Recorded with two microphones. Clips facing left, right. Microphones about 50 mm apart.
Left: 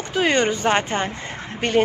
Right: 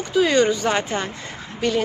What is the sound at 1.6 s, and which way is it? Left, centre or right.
Speech, left.